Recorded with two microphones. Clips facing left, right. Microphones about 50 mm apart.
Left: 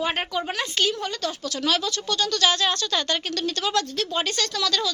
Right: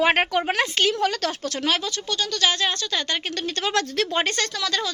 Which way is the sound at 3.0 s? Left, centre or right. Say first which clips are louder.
Left 1 dB; right.